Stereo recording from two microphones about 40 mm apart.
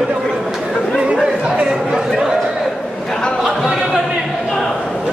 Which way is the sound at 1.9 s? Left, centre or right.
Centre.